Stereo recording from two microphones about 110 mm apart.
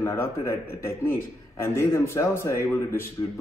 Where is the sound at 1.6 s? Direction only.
25° left (ahead or behind).